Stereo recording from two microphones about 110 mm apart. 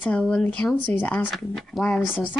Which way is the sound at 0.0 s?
10° left (ahead or behind).